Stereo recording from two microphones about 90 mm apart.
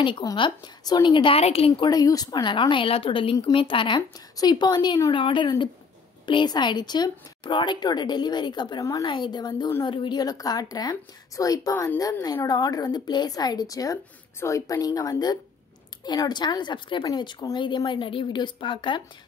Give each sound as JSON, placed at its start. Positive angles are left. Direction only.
{"t": 0.2, "sound": "a woman's voice", "side_deg": 50}
{"t": 1.9, "sound": "a woman's voice", "side_deg": 45}
{"t": 2.7, "sound": "a woman's voice", "side_deg": 80}
{"t": 4.4, "sound": "a woman's voice", "side_deg": 50}
{"t": 5.1, "sound": "a woman's voice", "side_deg": 65}